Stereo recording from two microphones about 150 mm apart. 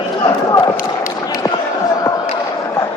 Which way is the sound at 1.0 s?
25° left (ahead or behind).